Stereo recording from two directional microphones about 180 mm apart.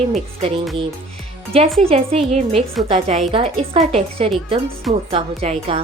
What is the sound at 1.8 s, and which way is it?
Speech, 35° right (ahead or behind).